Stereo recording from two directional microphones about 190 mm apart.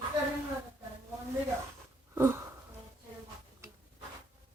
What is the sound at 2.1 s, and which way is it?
Wheeze, 15° right (ahead or behind).